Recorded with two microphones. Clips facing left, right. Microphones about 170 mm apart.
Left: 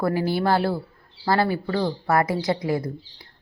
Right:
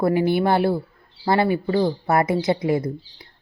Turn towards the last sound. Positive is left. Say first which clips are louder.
# right 4 dB
turn(degrees=-20)  # may be behind; listen again after turning